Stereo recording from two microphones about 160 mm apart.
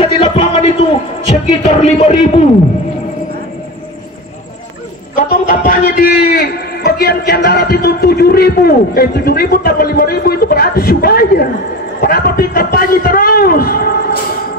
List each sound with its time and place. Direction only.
0.0 s a sound: 35° left (ahead or behind)
1.6 s a man's voice: 45° left (ahead or behind)
5.1 s a man's voice: 65° left (ahead or behind)